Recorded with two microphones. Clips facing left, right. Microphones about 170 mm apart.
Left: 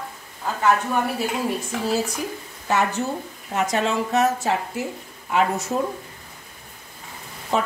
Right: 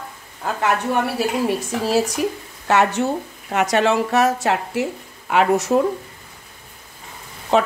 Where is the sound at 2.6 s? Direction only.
70° right (ahead or behind).